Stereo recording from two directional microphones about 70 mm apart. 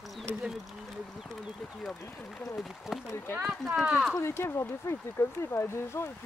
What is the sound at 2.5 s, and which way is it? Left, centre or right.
Speech, centre.